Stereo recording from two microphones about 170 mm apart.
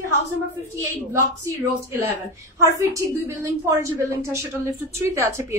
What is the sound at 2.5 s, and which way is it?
A woman's voice, 20° right (ahead or behind).